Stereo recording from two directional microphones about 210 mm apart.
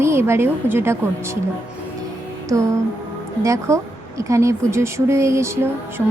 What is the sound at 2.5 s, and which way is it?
A woman's voice, 15° right (ahead or behind).